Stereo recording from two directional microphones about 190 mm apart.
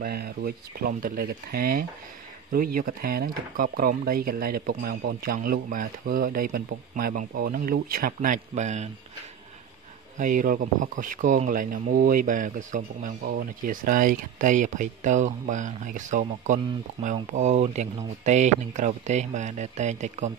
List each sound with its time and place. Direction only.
0.0 s speech: 55° right (ahead or behind); by 8.9 s 40° right (ahead or behind)
10.1 s speech: 45° right (ahead or behind)